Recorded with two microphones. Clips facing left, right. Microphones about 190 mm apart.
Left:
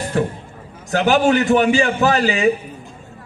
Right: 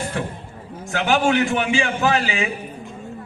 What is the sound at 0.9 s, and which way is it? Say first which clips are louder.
A man's voice: left 4 dB; 40° left (ahead or behind).